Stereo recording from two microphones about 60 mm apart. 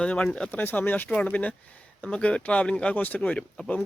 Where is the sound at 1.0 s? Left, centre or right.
Centre.